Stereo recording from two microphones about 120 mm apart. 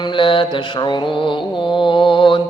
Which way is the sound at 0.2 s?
45° left (ahead or behind).